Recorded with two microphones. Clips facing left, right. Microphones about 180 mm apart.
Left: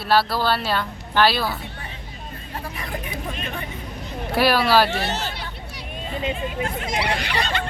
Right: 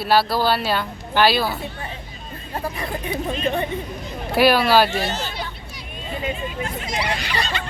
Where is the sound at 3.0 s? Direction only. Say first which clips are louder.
Right 7 dB; 25° right (ahead or behind).